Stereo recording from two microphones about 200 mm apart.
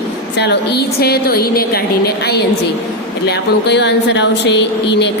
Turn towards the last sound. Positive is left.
turn(degrees=60)  # may be behind; listen again after turning